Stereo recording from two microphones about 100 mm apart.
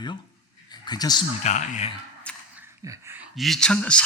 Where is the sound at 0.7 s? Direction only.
40° left (ahead or behind).